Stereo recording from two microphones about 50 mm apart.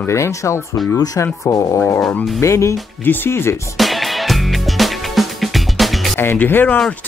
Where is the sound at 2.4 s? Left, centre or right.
Left.